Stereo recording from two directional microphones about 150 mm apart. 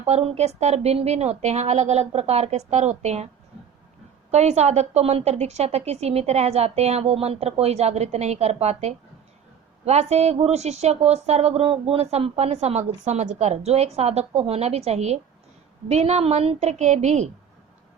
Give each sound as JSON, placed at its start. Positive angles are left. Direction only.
{"t": 0.0, "sound": "speech", "side_deg": -45}
{"t": 4.3, "sound": "speech", "side_deg": -50}